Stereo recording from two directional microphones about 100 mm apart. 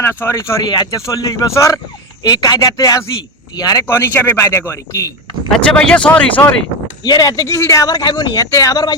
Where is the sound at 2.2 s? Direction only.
40° left (ahead or behind).